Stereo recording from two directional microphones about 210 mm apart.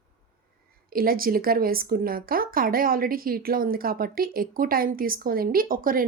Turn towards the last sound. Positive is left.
turn(degrees=-40)  # may be behind; listen again after turning